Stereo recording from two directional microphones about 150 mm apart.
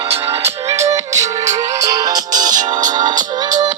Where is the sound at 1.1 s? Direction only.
20° right (ahead or behind).